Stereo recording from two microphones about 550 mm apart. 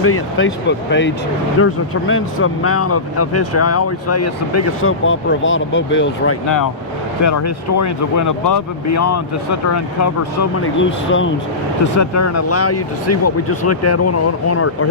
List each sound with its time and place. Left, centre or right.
0.0 s speech: left